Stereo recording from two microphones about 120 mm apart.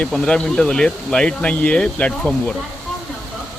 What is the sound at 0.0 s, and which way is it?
Speech, 5° left (ahead or behind).